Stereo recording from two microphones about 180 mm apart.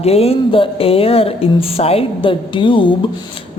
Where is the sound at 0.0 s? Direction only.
35° left (ahead or behind).